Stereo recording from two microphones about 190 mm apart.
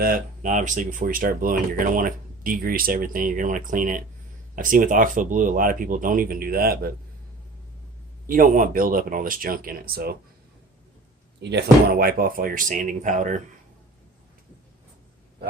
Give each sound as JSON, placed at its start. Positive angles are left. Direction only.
{"t": 0.0, "sound": "speech", "side_deg": -45}
{"t": 8.3, "sound": "speech", "side_deg": -45}
{"t": 11.3, "sound": "speech", "side_deg": -65}